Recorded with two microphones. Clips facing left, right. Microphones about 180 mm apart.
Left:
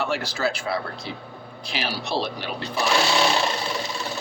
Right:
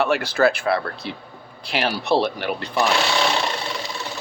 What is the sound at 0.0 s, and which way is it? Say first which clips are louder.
Speech: right 7 dB; 60° right (ahead or behind).